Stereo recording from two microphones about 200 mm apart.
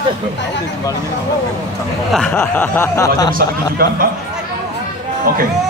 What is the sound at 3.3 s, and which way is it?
Speech, 45° right (ahead or behind).